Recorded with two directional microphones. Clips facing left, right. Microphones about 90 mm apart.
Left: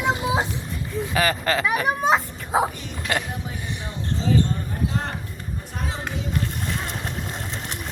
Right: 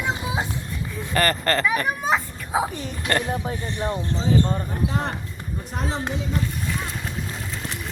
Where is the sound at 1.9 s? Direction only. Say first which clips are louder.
Left 3 dB; 25° left (ahead or behind).